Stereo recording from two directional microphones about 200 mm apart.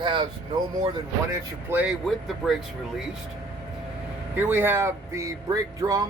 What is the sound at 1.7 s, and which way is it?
Speech, 5° right (ahead or behind).